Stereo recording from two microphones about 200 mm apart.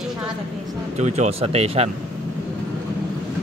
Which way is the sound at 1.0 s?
35° right (ahead or behind).